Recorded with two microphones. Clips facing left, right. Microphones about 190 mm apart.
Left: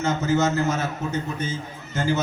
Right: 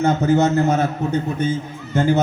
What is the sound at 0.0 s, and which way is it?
A man's voice, 60° right (ahead or behind).